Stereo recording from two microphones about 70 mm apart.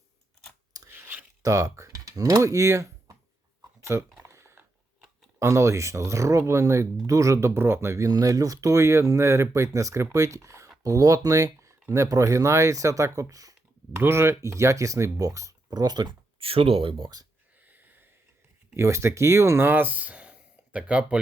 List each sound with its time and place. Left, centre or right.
0.9 s a sound: right
1.4 s speech: right
3.8 s a sound: right
5.4 s speech: right
8.0 s speech: right
13.9 s speech: right
15.7 s speech: right
17.6 s a sound: right
18.7 s speech: right
19.6 s speech: right